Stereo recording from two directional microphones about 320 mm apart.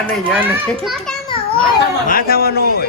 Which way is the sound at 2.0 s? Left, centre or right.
Left.